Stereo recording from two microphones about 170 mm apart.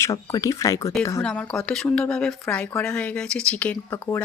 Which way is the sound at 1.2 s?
5° left (ahead or behind).